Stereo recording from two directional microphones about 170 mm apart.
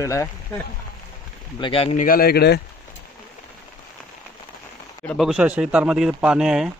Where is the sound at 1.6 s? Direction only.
35° left (ahead or behind).